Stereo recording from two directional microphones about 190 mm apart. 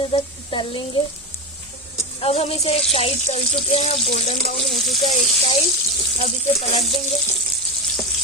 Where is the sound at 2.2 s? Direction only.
30° left (ahead or behind).